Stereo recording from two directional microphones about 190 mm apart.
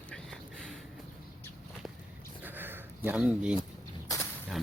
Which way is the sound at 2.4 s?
10° right (ahead or behind).